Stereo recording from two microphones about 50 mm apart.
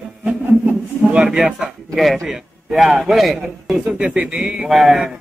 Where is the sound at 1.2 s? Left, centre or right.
Centre.